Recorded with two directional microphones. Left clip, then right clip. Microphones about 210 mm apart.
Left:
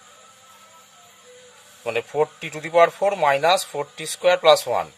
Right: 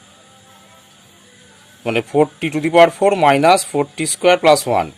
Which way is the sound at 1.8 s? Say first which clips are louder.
Right 6 dB; 15° right (ahead or behind).